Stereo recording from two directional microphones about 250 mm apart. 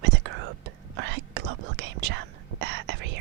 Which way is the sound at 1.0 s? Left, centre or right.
Right.